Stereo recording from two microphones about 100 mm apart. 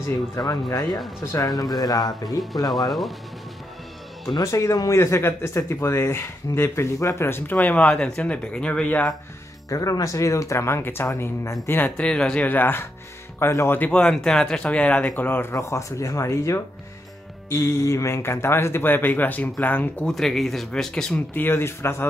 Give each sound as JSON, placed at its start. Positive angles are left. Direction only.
{"t": 0.4, "sound": "speech", "side_deg": 40}
{"t": 1.2, "sound": "speech", "side_deg": 30}
{"t": 1.5, "sound": "speech", "side_deg": 40}
{"t": 2.9, "sound": "speech", "side_deg": 0}
{"t": 4.4, "sound": "speech", "side_deg": 30}
{"t": 7.5, "sound": "speech", "side_deg": 10}
{"t": 9.7, "sound": "speech", "side_deg": 35}
{"t": 12.0, "sound": "speech", "side_deg": 10}
{"t": 15.5, "sound": "speech", "side_deg": 30}
{"t": 20.1, "sound": "speech", "side_deg": 0}
{"t": 21.3, "sound": "speech", "side_deg": 20}